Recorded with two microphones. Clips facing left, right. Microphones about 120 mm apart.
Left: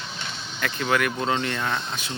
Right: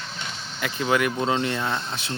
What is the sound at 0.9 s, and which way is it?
Speech, 20° right (ahead or behind).